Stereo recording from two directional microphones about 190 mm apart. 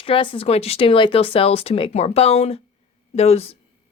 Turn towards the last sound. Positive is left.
turn(degrees=35)  # may be behind; listen again after turning